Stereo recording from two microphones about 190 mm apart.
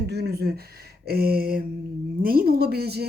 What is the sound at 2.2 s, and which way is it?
Speech, 50° right (ahead or behind).